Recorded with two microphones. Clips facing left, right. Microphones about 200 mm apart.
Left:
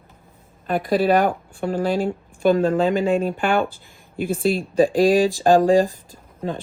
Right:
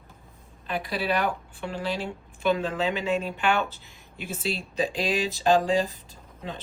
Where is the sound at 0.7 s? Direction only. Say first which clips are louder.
Left 10 dB; 50° left (ahead or behind).